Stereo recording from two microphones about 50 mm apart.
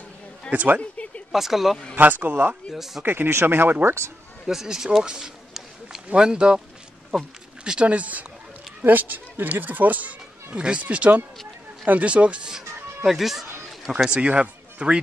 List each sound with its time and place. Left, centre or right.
0.5 s speech: right
1.3 s speech: centre
2.0 s speech: right
2.7 s speech: centre
3.0 s speech: right
3.8 s speech: right
4.5 s speech: centre
7.1 s speech: centre
7.6 s speech: right
10.5 s speech: right
12.4 s speech: centre
13.9 s speech: centre